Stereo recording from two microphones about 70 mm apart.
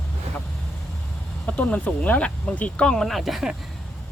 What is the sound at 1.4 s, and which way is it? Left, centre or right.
Speech, left.